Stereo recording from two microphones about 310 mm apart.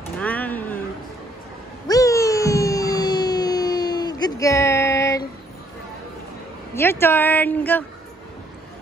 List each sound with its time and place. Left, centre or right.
0.2 s a sound: centre
1.9 s music: centre
6.7 s speech: centre